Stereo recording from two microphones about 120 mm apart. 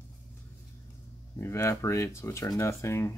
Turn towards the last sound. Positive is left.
turn(degrees=25)  # may be behind; listen again after turning